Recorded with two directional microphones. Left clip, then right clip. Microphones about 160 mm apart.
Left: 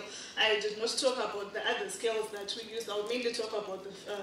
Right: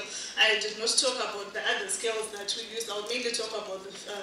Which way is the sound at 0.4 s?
30° right (ahead or behind).